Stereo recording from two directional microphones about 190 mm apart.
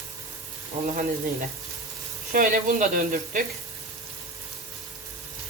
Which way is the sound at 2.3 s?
45° right (ahead or behind).